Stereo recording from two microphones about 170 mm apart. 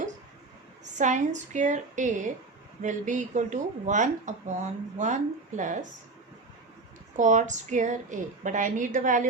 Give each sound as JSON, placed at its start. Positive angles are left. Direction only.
{"t": 0.9, "sound": "speech", "side_deg": -45}
{"t": 7.2, "sound": "speech", "side_deg": -45}